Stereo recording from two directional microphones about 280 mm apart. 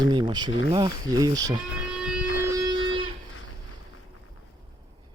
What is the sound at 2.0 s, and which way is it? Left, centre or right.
Music, centre.